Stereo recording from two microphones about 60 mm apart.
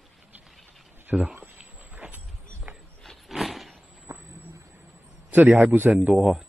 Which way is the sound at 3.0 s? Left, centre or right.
Centre.